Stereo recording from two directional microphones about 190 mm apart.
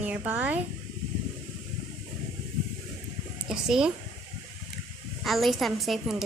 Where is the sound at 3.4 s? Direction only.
5° right (ahead or behind).